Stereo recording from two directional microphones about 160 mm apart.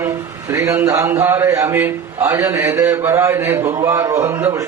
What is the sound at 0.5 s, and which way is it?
A man's voice, 20° right (ahead or behind).